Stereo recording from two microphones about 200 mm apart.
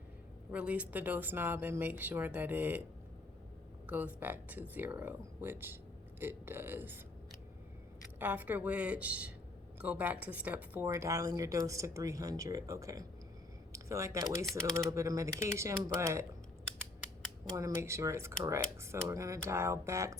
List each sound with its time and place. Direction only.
0.5 s a woman's voice: 5° right (ahead or behind)
3.8 s a woman's voice: 10° right (ahead or behind)
8.2 s a woman's voice: 10° right (ahead or behind)
17.6 s a woman's voice: 15° right (ahead or behind)